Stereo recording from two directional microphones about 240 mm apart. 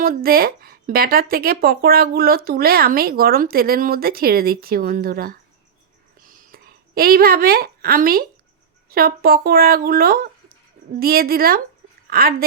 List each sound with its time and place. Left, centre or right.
0.0 s speech: right
6.2 s a sound: right
8.9 s speech: right